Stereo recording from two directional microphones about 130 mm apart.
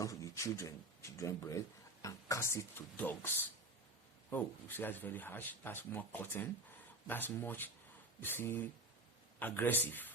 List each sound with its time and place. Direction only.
0.0 s speech: 25° left (ahead or behind)